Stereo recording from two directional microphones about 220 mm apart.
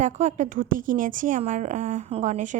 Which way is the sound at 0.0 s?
35° right (ahead or behind).